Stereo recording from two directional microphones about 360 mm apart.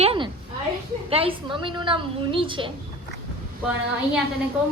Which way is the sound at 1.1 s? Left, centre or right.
Centre.